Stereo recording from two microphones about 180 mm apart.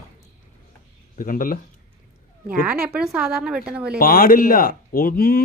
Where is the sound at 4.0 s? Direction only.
55° left (ahead or behind).